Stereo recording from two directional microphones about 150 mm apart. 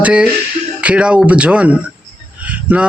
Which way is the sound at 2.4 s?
10° right (ahead or behind).